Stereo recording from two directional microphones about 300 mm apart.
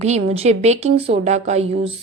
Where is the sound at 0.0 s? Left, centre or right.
Right.